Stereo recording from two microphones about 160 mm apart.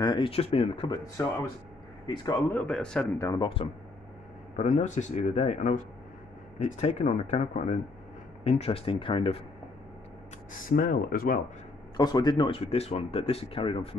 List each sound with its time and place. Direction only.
0.0 s speech: 30° left (ahead or behind)
2.0 s speech: 25° left (ahead or behind)
2.5 s a man's voice: 5° left (ahead or behind)
3.2 s speech: 20° left (ahead or behind)
4.6 s speech: 50° left (ahead or behind); by 9.4 s 35° left (ahead or behind)
10.5 s speech: 60° left (ahead or behind)
12.0 s speech: 25° left (ahead or behind)